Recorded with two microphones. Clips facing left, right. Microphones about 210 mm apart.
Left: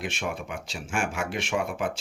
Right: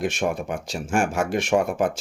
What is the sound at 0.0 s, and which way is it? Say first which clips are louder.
Speech: right 8 dB; 45° right (ahead or behind).